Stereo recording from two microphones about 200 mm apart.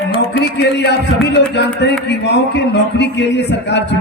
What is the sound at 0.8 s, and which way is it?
A man's voice, 60° left (ahead or behind).